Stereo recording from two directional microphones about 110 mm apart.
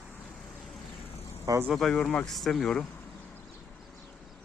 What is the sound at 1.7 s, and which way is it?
Speech, 5° left (ahead or behind).